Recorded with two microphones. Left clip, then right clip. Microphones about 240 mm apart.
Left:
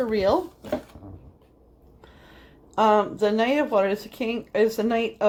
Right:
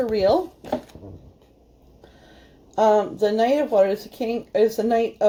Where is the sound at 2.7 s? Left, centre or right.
Left.